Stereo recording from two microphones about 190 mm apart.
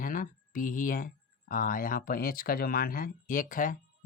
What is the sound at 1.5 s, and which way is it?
Speech, 45° left (ahead or behind).